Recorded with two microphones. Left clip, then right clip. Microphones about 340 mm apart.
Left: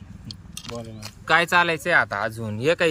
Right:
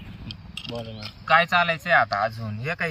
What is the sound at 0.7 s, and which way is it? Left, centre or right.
Speech, centre.